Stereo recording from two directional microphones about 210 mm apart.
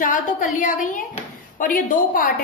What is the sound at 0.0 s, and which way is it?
A woman's voice, 40° left (ahead or behind).